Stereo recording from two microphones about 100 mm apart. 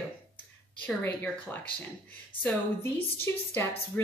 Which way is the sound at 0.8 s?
15° left (ahead or behind).